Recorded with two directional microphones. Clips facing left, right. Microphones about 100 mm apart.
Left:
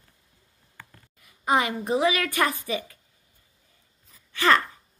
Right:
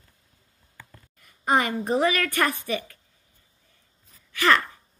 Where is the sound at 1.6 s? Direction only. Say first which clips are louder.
Right 1 dB; 10° left (ahead or behind).